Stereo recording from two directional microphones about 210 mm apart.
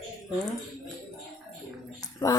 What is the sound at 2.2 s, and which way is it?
Speech, 15° left (ahead or behind).